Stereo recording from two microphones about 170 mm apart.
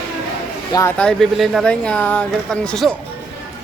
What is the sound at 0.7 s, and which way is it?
Speech, 20° left (ahead or behind).